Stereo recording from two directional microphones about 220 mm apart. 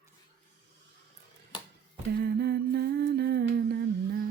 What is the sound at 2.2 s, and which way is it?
Humming, 45° right (ahead or behind).